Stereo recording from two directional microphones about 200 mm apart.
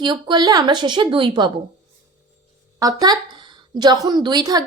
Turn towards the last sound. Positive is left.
turn(degrees=-20)  # may be behind; listen again after turning